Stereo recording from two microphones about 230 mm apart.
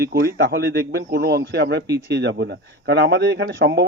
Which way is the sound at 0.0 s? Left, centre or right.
Right.